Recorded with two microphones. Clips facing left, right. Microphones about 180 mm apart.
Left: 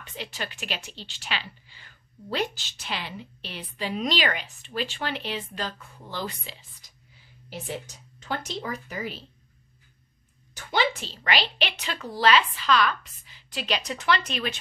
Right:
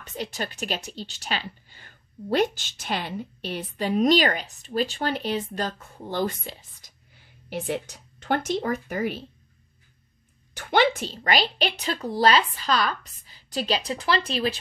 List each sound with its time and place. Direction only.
0.0 s a woman's voice: 45° right (ahead or behind)
7.2 s speech: 60° right (ahead or behind)
10.5 s a sound: 60° right (ahead or behind)
11.2 s a woman's voice: 40° right (ahead or behind)